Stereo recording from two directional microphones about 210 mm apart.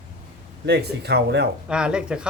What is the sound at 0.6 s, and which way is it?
Speech, 50° right (ahead or behind).